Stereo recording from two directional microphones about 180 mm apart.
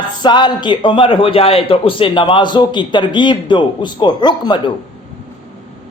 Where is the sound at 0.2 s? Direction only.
25° left (ahead or behind).